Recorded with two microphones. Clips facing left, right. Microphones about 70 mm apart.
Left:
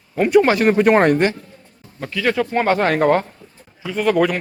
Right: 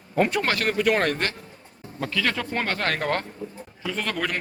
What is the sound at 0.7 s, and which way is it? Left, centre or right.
A man's voice, left.